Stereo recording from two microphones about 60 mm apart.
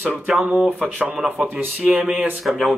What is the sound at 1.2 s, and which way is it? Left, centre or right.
Music, right.